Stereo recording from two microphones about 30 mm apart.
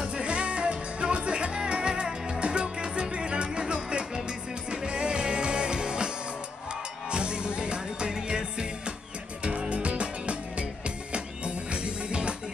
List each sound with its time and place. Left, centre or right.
0.0 s music: right
9.4 s music: right